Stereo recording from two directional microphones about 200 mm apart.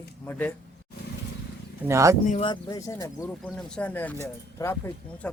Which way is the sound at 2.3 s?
25° left (ahead or behind).